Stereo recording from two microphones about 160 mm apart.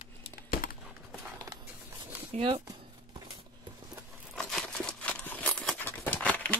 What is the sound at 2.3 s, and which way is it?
Speech, 35° right (ahead or behind).